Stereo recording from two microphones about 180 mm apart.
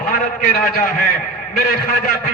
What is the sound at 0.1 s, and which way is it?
Speech, 50° left (ahead or behind).